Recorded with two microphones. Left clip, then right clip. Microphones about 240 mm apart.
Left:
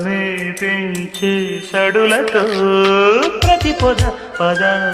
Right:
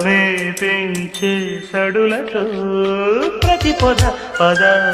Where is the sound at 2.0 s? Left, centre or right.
Left.